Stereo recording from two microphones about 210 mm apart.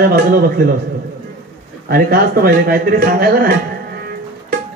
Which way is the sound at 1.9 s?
45° right (ahead or behind).